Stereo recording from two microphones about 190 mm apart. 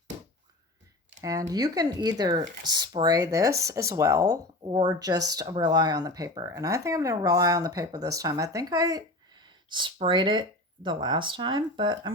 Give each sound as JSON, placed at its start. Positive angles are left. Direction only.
{"t": 1.2, "sound": "speech", "side_deg": -20}